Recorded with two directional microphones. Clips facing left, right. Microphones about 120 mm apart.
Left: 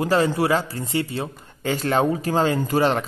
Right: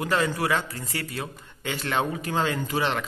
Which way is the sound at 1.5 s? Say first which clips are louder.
Left 8 dB; 40° left (ahead or behind).